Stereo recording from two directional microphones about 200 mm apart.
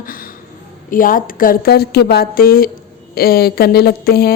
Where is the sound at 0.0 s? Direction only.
45° left (ahead or behind).